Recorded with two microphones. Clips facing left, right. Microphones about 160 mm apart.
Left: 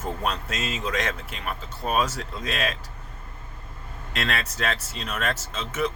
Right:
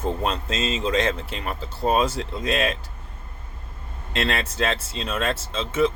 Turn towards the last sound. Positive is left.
turn(degrees=-30)  # may be behind; listen again after turning